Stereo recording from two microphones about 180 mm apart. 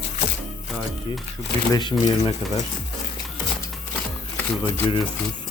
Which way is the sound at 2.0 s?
20° left (ahead or behind).